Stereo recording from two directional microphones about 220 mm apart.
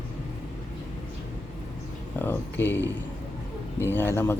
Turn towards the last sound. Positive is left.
turn(degrees=10)  # may be behind; listen again after turning